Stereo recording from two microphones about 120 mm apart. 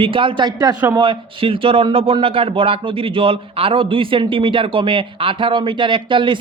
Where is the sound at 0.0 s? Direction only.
45° right (ahead or behind).